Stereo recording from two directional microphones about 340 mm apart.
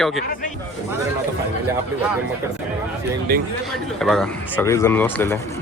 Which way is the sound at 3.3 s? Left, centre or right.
Right.